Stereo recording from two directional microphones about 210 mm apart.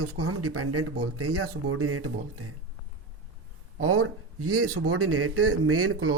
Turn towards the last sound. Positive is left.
turn(degrees=-90)